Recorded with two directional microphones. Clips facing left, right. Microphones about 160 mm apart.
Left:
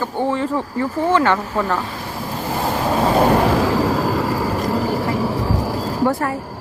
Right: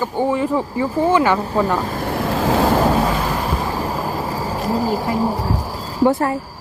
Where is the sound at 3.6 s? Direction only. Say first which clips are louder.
Left 5 dB; 90° left.